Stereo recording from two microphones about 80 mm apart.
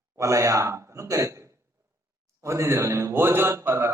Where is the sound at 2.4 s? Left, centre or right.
Right.